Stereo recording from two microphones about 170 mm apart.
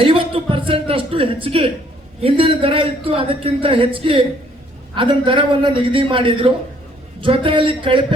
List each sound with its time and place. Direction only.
0.0 s a man's voice: 30° right (ahead or behind)